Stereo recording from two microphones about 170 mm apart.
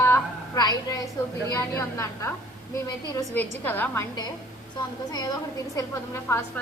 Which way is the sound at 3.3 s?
10° left (ahead or behind).